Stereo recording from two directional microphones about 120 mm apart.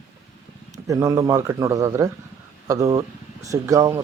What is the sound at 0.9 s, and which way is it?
Speech, 25° right (ahead or behind).